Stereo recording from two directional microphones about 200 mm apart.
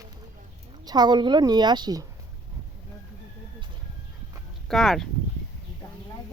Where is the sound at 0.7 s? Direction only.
20° right (ahead or behind).